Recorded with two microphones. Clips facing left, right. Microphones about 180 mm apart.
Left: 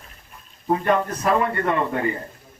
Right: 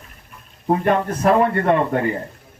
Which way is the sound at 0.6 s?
50° right (ahead or behind).